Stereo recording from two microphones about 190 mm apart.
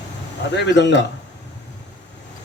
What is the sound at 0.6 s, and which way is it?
Speech, 70° left (ahead or behind).